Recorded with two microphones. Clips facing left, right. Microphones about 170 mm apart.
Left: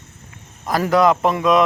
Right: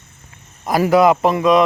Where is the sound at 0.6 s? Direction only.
10° right (ahead or behind).